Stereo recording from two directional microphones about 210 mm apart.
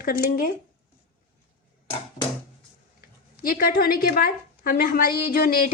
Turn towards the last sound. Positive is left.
turn(degrees=45)  # may be behind; listen again after turning